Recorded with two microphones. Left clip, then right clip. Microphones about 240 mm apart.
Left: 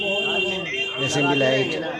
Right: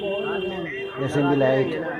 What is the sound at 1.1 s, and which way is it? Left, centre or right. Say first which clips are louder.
Speech: right 1 dB; left.